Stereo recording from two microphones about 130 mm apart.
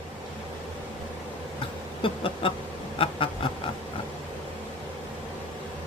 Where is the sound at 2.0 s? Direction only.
45° left (ahead or behind).